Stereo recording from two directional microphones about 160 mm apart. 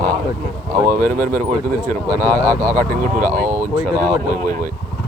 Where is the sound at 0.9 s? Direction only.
50° right (ahead or behind).